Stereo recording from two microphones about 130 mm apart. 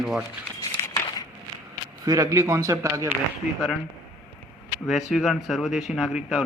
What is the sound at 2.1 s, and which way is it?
A man's voice, 25° right (ahead or behind).